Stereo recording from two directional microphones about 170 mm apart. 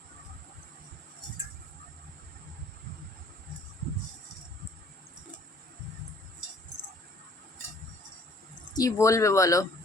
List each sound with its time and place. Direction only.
8.7 s speech: 20° left (ahead or behind)